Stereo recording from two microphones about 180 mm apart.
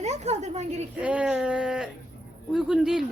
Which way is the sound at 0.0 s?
35° right (ahead or behind).